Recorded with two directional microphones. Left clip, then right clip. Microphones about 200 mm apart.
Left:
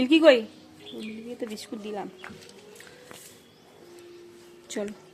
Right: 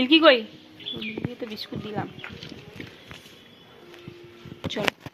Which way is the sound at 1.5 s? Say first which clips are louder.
Right 2 dB; 20° left (ahead or behind).